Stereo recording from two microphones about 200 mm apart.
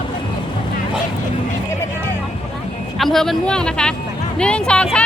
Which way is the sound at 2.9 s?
Centre (ahead or behind).